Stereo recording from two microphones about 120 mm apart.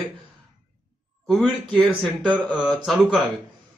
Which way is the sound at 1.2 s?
5° left (ahead or behind).